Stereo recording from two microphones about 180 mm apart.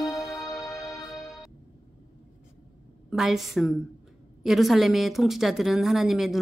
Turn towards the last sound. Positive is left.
turn(degrees=0)  # may be behind; listen again after turning